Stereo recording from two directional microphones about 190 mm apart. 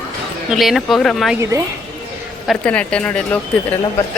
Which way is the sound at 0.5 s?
Centre (ahead or behind).